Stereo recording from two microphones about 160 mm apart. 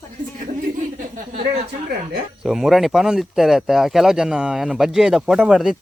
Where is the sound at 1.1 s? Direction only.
50° right (ahead or behind).